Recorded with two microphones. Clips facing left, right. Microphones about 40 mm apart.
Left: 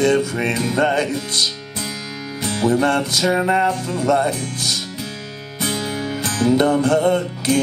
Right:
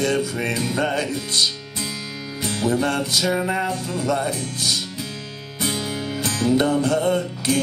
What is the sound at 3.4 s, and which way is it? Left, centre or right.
Music, left.